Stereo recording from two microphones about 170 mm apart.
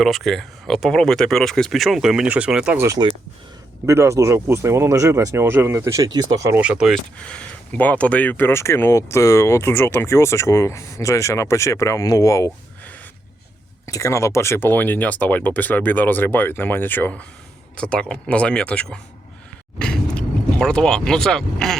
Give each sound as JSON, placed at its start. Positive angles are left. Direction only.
{"t": 0.0, "sound": "speech", "side_deg": 0}
{"t": 2.8, "sound": "speech", "side_deg": -20}
{"t": 6.6, "sound": "speech", "side_deg": -5}